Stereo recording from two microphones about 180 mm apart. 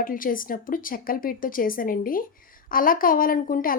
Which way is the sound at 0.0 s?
50° left (ahead or behind).